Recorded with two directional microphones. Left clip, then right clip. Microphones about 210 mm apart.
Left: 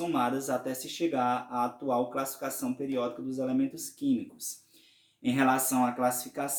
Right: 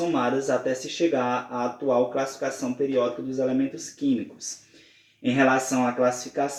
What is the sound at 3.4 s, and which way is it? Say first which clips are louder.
Speech: right 5 dB; 35° left (ahead or behind).